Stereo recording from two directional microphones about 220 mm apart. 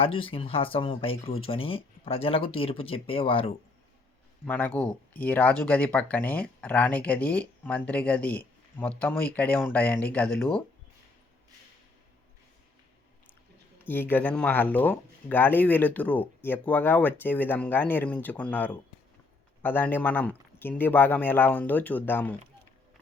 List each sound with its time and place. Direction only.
0.0 s speech: 25° left (ahead or behind)
4.4 s speech: 5° left (ahead or behind)
13.8 s speech: 10° left (ahead or behind)